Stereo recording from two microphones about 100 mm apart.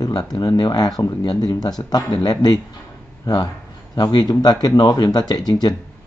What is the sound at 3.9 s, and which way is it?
Speech, 45° left (ahead or behind).